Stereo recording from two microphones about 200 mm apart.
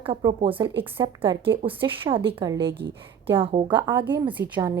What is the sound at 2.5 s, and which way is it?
Speech, 55° right (ahead or behind).